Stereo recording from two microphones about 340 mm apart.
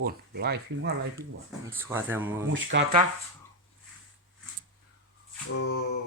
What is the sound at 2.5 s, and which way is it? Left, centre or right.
Speech, right.